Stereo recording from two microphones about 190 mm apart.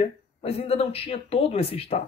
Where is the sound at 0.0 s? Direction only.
30° left (ahead or behind).